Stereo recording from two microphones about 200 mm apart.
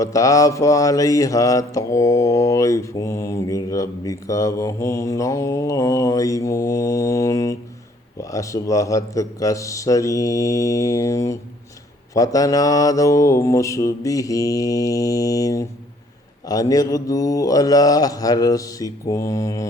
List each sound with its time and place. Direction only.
0.0 s mantra: 15° left (ahead or behind)